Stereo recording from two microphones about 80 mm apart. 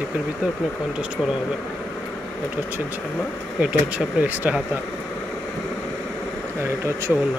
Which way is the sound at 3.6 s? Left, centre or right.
Centre.